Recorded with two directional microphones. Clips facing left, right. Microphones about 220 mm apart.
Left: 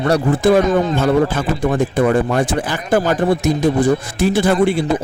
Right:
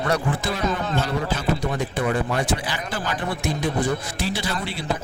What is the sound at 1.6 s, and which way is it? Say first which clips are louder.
A man's voice: left 9 dB; 50° left (ahead or behind).